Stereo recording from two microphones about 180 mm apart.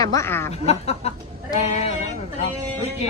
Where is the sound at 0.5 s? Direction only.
35° left (ahead or behind).